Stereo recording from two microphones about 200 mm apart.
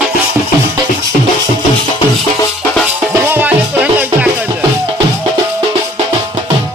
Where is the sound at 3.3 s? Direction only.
10° right (ahead or behind).